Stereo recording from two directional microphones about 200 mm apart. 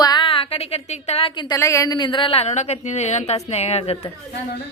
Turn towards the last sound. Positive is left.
turn(degrees=30)  # may be behind; listen again after turning